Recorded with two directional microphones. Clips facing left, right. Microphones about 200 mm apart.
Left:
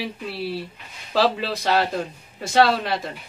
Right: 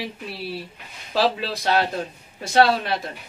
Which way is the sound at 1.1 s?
Centre (ahead or behind).